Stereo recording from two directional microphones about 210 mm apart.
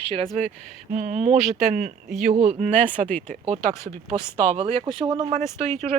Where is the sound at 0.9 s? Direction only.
35° right (ahead or behind).